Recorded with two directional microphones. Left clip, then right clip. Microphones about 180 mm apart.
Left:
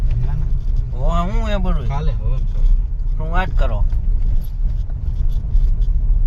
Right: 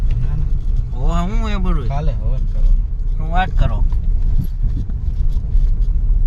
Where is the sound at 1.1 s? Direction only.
Centre (ahead or behind).